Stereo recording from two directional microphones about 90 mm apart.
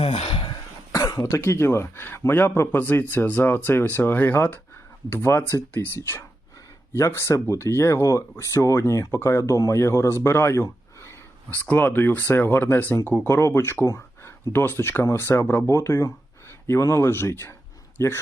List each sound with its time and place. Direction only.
0.0 s cough: 90° left
0.9 s speech: 40° left (ahead or behind)
11.6 s speech: 20° left (ahead or behind)